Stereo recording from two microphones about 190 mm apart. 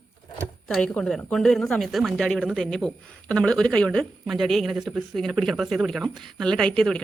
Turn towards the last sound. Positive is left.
turn(degrees=5)  # may be behind; listen again after turning